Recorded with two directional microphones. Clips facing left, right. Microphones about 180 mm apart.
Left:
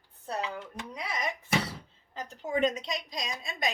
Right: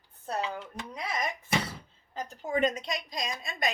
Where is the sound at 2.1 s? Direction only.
45° right (ahead or behind).